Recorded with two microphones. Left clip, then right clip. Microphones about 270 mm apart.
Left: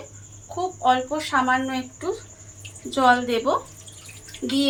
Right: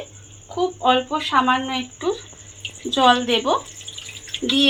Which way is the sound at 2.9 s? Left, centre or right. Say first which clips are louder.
Right 3 dB; centre.